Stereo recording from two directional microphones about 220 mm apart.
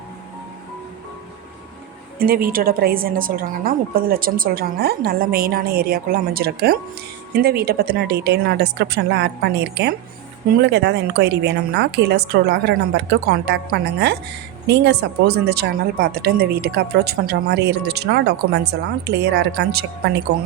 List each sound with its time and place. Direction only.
2.1 s speech: 40° right (ahead or behind)